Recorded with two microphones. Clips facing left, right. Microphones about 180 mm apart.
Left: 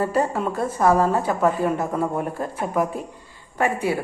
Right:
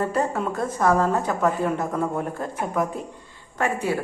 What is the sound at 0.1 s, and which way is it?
A woman's voice, 5° left (ahead or behind).